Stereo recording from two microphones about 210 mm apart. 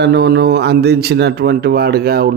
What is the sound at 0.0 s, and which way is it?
Speech, 50° right (ahead or behind).